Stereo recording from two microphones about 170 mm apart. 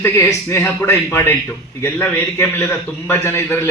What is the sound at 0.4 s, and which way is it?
A man's voice, 15° left (ahead or behind).